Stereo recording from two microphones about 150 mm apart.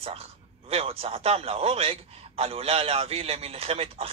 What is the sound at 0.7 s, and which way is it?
A man's voice, 40° right (ahead or behind).